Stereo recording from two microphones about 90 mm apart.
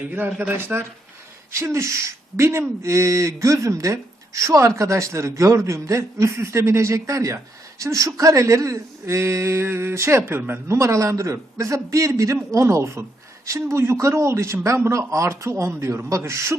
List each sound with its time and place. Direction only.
0.0 s speech: 20° right (ahead or behind)